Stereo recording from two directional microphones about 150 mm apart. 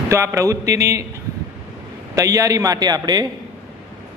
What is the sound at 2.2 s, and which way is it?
A man's voice, 20° right (ahead or behind).